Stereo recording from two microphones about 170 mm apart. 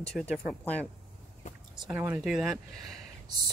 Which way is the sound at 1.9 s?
15° right (ahead or behind).